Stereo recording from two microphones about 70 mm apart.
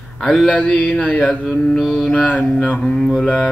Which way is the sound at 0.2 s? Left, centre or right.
Centre.